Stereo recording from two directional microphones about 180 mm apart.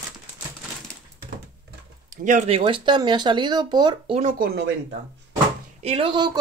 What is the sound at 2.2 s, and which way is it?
Speech, 40° right (ahead or behind).